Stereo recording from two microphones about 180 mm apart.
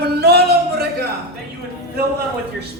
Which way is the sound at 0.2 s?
65° right (ahead or behind).